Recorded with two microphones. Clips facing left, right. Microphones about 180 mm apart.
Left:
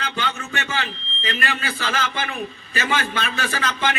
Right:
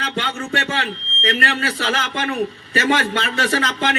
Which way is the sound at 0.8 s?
70° right (ahead or behind).